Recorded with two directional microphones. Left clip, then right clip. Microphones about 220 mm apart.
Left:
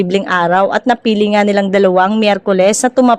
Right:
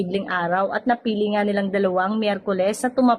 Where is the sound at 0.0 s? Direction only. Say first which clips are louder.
Left 10 dB; 40° left (ahead or behind).